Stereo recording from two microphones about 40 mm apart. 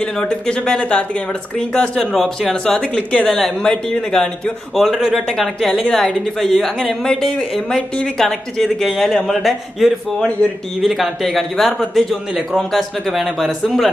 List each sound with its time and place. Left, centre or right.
0.2 s speech: left
2.0 s a man's voice: centre
2.5 s speech: centre
3.3 s speech: centre
3.6 s speech: left
4.7 s a man's voice: centre; by 7.4 s left
8.2 s a man's voice: centre
10.4 s speech: left
10.8 s a man's voice: centre